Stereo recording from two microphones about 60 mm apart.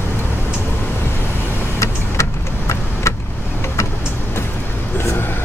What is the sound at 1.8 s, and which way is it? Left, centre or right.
Vehicle, left.